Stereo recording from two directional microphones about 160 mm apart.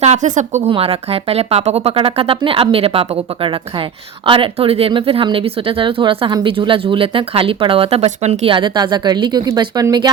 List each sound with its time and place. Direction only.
0.0 s a woman's voice: 45° right (ahead or behind)
0.7 s speech: 40° right (ahead or behind)